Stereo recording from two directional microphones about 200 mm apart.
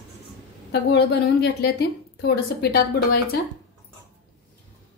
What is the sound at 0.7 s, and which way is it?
A woman's voice, 55° left (ahead or behind).